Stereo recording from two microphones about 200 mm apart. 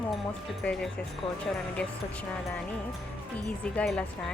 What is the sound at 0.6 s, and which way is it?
Speech, 5° left (ahead or behind).